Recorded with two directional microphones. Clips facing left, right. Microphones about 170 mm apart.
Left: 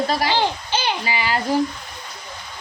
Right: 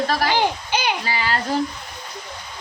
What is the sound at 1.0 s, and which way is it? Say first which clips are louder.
Speech: left 1 dB; 15° left (ahead or behind).